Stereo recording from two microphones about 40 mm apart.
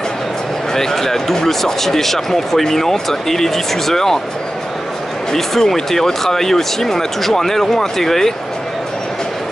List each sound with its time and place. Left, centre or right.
0.7 s speech: centre
5.3 s speech: centre